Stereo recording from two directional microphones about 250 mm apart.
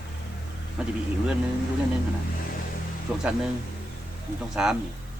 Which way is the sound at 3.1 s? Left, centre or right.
Centre.